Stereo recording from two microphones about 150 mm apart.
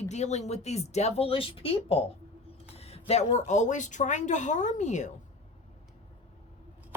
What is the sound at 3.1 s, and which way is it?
Speech, 45° left (ahead or behind).